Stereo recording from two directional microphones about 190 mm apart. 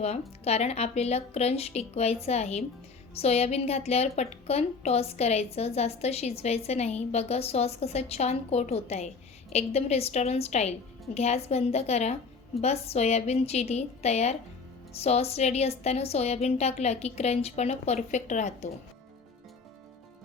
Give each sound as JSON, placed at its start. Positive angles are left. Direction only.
{"t": 0.0, "sound": "a woman's voice", "side_deg": 35}